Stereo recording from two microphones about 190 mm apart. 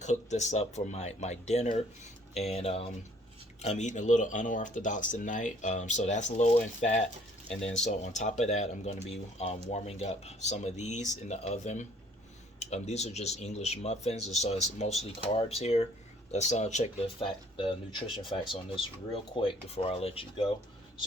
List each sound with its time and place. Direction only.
0.0 s speech: 35° left (ahead or behind)